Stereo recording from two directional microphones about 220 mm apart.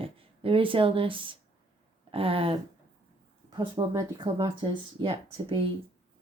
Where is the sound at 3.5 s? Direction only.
15° right (ahead or behind).